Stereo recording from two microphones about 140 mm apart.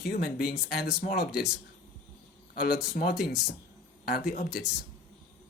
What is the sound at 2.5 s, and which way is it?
Speech, 90° left.